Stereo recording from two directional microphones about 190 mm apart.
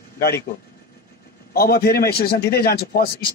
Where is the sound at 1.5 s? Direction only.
55° left (ahead or behind).